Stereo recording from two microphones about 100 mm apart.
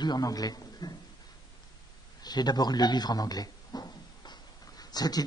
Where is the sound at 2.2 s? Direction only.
45° left (ahead or behind).